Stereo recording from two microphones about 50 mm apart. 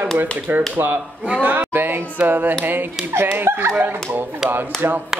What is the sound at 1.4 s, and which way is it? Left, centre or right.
Speech, right.